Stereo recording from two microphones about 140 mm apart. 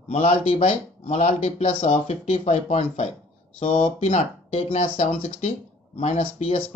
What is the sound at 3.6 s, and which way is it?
Speech, 40° left (ahead or behind).